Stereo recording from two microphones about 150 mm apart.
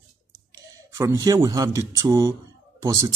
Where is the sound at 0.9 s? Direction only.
20° right (ahead or behind).